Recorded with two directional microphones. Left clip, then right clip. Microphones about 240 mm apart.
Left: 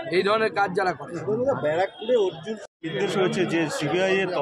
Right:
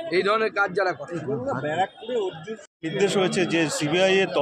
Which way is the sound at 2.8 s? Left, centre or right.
Right.